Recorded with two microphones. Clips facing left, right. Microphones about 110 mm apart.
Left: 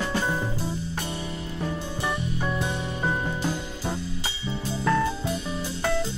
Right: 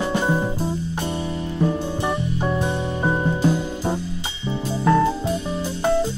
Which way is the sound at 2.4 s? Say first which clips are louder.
Right 6 dB; 25° right (ahead or behind).